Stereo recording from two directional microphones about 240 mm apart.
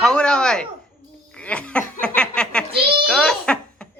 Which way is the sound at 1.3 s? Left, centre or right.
Centre.